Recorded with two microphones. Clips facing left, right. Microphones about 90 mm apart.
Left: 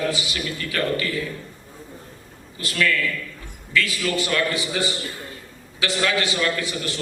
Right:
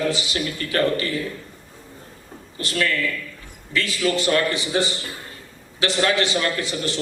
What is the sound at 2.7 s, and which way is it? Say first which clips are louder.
A man's voice: left 1 dB; 35° right (ahead or behind).